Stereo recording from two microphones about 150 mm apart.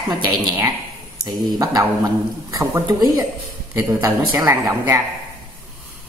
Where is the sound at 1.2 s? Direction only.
25° right (ahead or behind).